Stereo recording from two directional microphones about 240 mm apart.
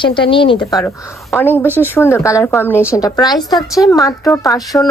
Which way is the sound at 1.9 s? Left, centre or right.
Centre.